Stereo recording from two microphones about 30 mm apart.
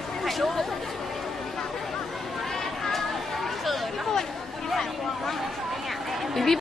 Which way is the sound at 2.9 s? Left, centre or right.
Centre.